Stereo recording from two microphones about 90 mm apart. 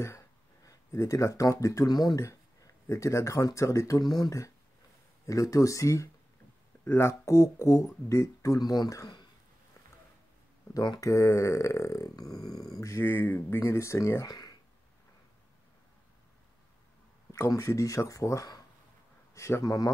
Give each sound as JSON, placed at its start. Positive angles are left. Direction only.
{"t": 0.7, "sound": "speech", "side_deg": 40}
{"t": 2.2, "sound": "speech", "side_deg": 35}
{"t": 8.5, "sound": "speech", "side_deg": 50}
{"t": 10.7, "sound": "speech", "side_deg": 45}
{"t": 12.8, "sound": "speech", "side_deg": 30}
{"t": 14.2, "sound": "speech", "side_deg": 45}
{"t": 17.3, "sound": "speech", "side_deg": 35}